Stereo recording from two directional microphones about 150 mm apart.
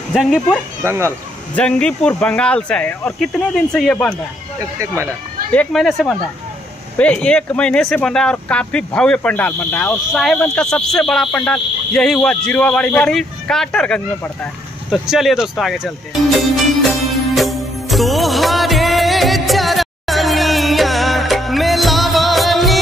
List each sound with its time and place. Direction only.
0.1 s speech: centre (ahead or behind)
0.8 s speech: 15° right (ahead or behind)
1.5 s speech: 10° left (ahead or behind)
4.6 s speech: 20° right (ahead or behind)
5.5 s speech: 5° left (ahead or behind)
17.4 s music: centre (ahead or behind)